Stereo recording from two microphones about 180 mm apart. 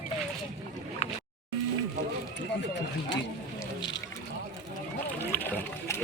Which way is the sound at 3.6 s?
25° left (ahead or behind).